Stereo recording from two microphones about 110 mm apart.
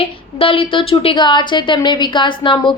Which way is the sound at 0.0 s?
55° left (ahead or behind).